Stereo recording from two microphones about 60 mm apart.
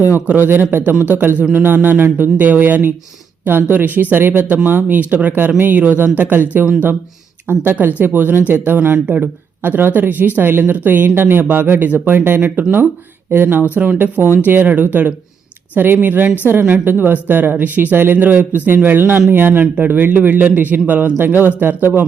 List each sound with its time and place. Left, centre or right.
0.3 s speech: right